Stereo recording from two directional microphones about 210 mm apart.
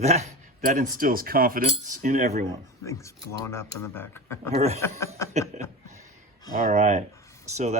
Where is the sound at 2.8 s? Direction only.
15° left (ahead or behind).